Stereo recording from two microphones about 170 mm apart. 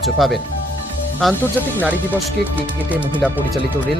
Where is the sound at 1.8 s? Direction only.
10° right (ahead or behind).